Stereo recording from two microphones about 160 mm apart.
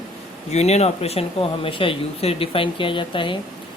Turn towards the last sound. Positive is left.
turn(degrees=30)  # may be behind; listen again after turning